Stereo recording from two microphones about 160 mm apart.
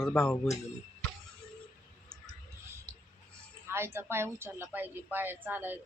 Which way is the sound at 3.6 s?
15° right (ahead or behind).